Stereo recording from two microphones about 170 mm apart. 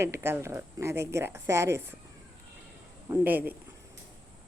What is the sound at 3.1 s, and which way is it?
Speech, 10° right (ahead or behind).